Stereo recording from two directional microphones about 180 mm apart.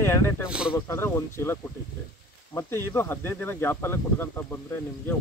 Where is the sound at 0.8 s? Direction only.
15° left (ahead or behind).